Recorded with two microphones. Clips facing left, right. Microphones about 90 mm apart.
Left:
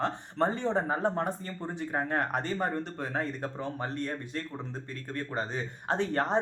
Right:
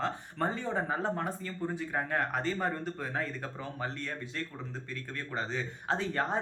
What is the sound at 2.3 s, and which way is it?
Speech, 45° left (ahead or behind).